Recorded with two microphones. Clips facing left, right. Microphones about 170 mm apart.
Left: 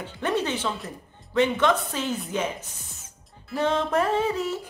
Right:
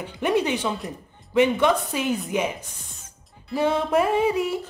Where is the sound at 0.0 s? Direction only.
15° right (ahead or behind).